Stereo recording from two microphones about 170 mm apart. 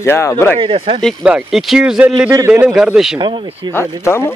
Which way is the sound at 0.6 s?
30° right (ahead or behind).